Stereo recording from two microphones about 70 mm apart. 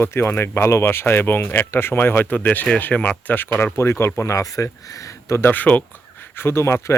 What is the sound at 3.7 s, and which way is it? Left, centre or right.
Speech, left.